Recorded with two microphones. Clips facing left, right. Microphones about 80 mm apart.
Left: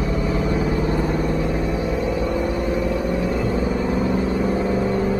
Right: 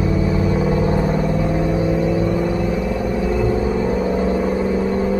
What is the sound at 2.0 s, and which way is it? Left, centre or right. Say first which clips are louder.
Vehicle: right 3 dB; centre.